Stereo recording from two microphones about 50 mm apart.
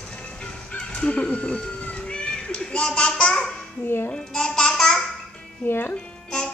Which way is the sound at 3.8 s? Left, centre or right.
Left.